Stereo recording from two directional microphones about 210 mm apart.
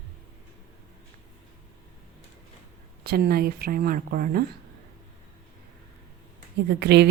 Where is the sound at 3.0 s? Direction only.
45° right (ahead or behind).